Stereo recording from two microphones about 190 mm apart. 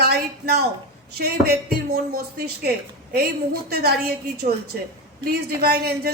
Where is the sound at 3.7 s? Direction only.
55° right (ahead or behind).